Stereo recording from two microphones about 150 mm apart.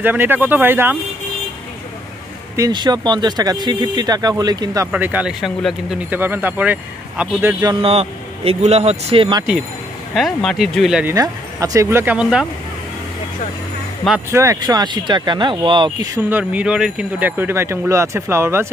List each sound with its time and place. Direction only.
0.0 s speech: 15° right (ahead or behind)
2.5 s speech: 25° right (ahead or behind)
4.9 s speech: 10° right (ahead or behind)
7.8 s speech: 40° right (ahead or behind)
10.1 s speech: centre (ahead or behind)
11.1 s speech: 20° right (ahead or behind); by 12.4 s 5° right (ahead or behind)
14.3 s speech: 20° right (ahead or behind)
16.3 s speech: 10° right (ahead or behind)